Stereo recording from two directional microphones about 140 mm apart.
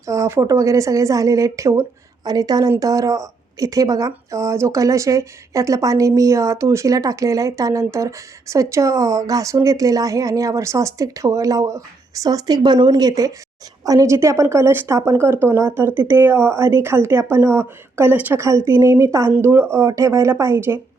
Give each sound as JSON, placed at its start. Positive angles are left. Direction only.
{"t": 0.0, "sound": "a woman's voice", "side_deg": -20}